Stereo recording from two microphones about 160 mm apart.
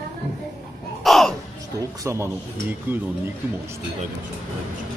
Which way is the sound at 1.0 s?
Centre (ahead or behind).